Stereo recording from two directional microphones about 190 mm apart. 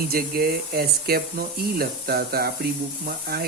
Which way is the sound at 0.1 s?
50° right (ahead or behind).